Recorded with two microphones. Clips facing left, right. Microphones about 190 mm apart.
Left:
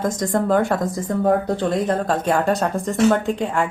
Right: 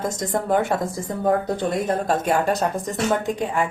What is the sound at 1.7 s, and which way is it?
Speech, 10° right (ahead or behind).